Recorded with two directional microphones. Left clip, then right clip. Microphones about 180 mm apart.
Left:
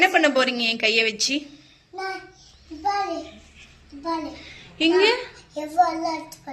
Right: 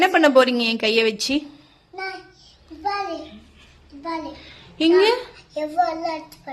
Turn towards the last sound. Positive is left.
turn(degrees=-20)  # may be behind; listen again after turning